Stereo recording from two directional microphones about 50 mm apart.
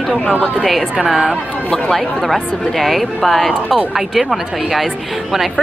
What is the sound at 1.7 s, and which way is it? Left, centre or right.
A woman's voice, centre.